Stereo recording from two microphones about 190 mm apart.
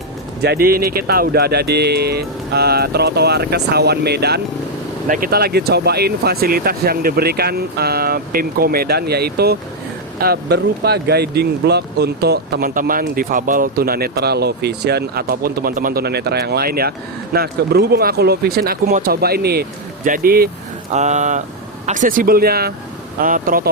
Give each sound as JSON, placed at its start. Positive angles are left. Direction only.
{"t": 0.4, "sound": "speech", "side_deg": -55}
{"t": 5.0, "sound": "speech", "side_deg": -45}
{"t": 20.9, "sound": "speech", "side_deg": -40}